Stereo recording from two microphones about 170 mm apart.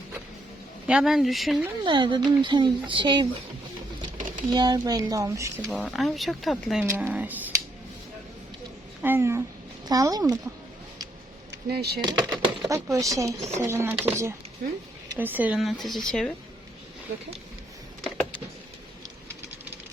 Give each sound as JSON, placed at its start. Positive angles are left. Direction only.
{"t": 0.9, "sound": "speech", "side_deg": -5}
{"t": 1.8, "sound": "speech", "side_deg": -30}
{"t": 4.4, "sound": "speech", "side_deg": -25}
{"t": 5.7, "sound": "speech", "side_deg": 0}
{"t": 6.8, "sound": "speech", "side_deg": -15}
{"t": 9.0, "sound": "speech", "side_deg": -10}
{"t": 11.5, "sound": "speech", "side_deg": -75}
{"t": 12.0, "sound": "speech", "side_deg": -20}
{"t": 14.6, "sound": "speech", "side_deg": -55}
{"t": 15.2, "sound": "speech", "side_deg": -10}
{"t": 18.0, "sound": "a sound", "side_deg": 10}